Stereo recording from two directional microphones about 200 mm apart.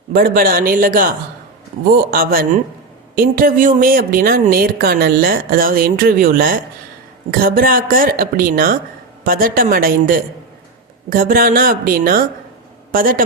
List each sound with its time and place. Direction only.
0.1 s a woman's voice: 45° right (ahead or behind)